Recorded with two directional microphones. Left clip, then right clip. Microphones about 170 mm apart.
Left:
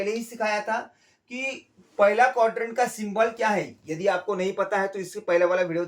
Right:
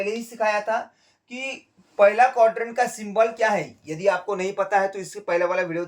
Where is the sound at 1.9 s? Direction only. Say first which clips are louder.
Right 3 dB; 30° right (ahead or behind).